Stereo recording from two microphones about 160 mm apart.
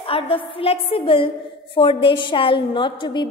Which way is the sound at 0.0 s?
35° left (ahead or behind).